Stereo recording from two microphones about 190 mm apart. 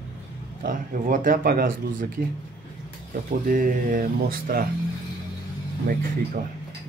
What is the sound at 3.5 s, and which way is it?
Speech, 45° right (ahead or behind).